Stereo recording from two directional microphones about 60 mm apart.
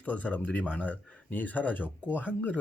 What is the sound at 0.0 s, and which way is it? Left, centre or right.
Speech, left.